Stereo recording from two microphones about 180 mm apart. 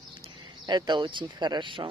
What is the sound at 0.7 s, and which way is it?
Speech, 25° right (ahead or behind).